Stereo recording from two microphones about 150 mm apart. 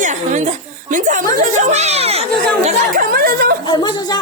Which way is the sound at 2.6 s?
65° right (ahead or behind).